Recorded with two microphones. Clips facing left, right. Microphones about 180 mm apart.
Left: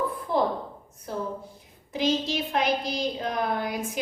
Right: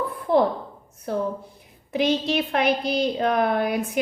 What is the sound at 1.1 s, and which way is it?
A woman's voice, 65° right (ahead or behind).